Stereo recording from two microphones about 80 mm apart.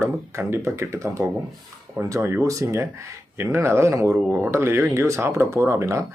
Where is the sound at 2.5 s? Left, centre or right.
Right.